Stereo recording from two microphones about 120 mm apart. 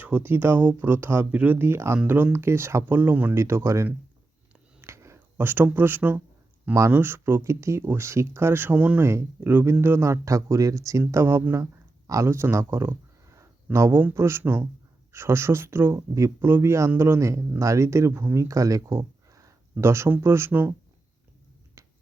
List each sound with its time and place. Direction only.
0.0 s speech: 15° right (ahead or behind)
4.8 s a sound: 25° right (ahead or behind)
6.9 s speech: 20° right (ahead or behind)
21.8 s finger snapping: 25° right (ahead or behind)